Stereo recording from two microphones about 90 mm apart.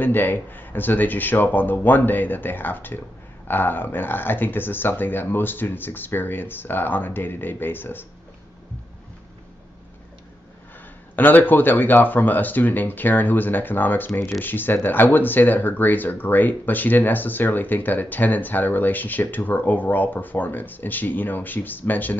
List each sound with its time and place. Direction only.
0.0 s speech: 20° left (ahead or behind)
11.1 s speech: 20° left (ahead or behind)